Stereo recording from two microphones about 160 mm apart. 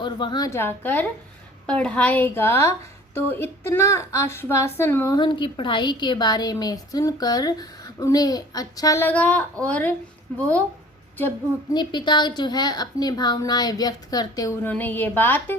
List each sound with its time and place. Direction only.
0.0 s a woman's voice: 30° left (ahead or behind)
5.1 s a woman's voice: 30° left (ahead or behind); by 10.4 s 10° left (ahead or behind)
11.7 s a woman's voice: 30° left (ahead or behind)
14.7 s a woman's voice: 10° left (ahead or behind)